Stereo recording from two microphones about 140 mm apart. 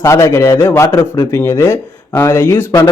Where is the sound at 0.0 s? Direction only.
20° left (ahead or behind).